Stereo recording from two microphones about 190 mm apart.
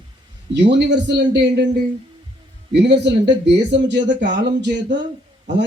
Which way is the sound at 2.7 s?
65° right (ahead or behind).